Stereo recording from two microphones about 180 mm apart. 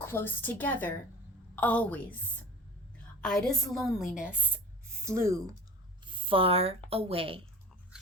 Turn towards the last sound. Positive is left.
turn(degrees=-30)  # may be behind; listen again after turning